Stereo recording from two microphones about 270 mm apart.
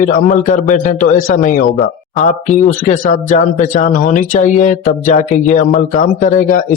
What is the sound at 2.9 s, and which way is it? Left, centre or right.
Speech, left.